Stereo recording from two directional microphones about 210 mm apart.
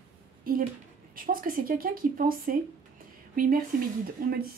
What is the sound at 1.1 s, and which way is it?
Speech, 40° right (ahead or behind).